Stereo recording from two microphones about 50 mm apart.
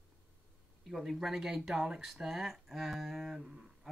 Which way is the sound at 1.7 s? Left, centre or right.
Centre.